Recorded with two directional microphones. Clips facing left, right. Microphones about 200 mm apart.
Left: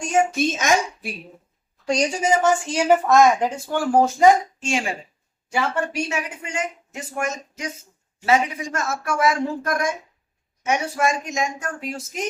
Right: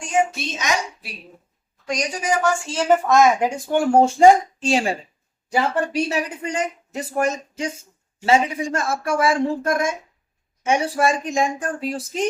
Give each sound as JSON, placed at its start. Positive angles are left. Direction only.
{"t": 0.3, "sound": "a woman's voice", "side_deg": 50}
{"t": 1.9, "sound": "a woman's voice", "side_deg": 25}
{"t": 3.1, "sound": "speech", "side_deg": 0}
{"t": 3.3, "sound": "speech", "side_deg": -15}